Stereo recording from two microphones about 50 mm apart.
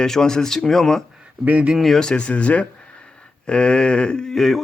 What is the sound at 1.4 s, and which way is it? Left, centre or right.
Speech, right.